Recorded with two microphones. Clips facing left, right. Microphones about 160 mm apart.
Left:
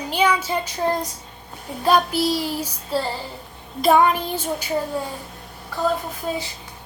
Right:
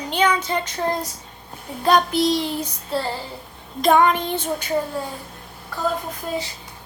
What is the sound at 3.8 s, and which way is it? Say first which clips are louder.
Speech: even; 5° left (ahead or behind).